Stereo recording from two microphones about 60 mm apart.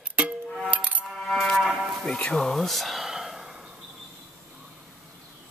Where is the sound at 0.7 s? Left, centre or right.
Right.